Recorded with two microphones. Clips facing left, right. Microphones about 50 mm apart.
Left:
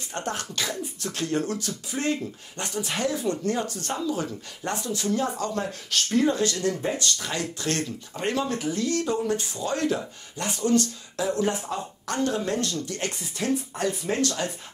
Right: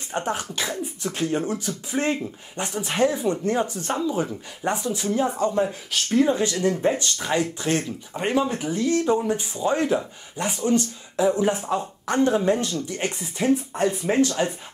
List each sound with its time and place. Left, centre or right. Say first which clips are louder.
0.1 s speech: right 4 dB; centre